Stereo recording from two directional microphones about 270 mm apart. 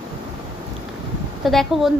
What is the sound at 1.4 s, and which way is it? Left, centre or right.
Speech, centre.